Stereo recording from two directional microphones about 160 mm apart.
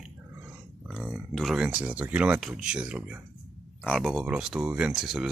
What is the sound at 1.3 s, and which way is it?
Speech, centre (ahead or behind).